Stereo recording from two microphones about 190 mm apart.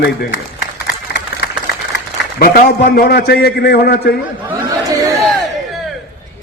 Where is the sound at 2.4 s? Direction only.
50° left (ahead or behind).